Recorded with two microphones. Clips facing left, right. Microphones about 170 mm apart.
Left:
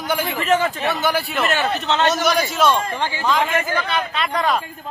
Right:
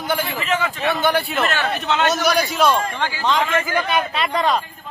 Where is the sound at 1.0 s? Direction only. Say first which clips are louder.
Right 1 dB; centre (ahead or behind).